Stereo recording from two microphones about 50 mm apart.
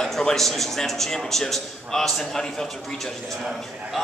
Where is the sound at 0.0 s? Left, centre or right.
Centre.